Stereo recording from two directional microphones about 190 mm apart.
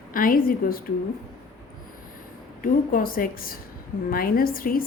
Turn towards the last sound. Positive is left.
turn(degrees=50)  # may be behind; listen again after turning